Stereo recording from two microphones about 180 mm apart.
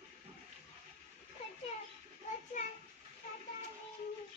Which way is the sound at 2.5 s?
45° left (ahead or behind).